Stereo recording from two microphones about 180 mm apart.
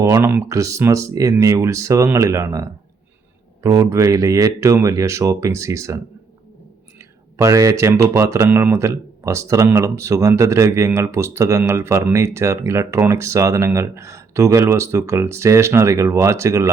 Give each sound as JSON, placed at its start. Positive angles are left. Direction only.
{"t": 0.0, "sound": "a man's voice", "side_deg": -15}
{"t": 7.3, "sound": "a man's voice", "side_deg": -15}